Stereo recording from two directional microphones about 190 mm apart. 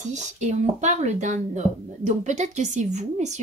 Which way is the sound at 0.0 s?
40° right (ahead or behind).